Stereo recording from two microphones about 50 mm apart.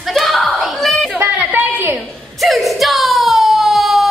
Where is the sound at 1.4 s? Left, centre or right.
Right.